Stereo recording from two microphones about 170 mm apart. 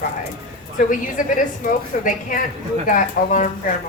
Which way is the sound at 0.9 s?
50° left (ahead or behind).